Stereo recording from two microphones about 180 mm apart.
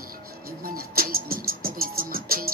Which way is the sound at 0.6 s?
55° right (ahead or behind).